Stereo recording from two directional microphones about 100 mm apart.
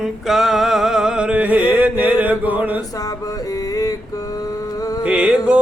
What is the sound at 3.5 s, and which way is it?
Mantra, 35° left (ahead or behind).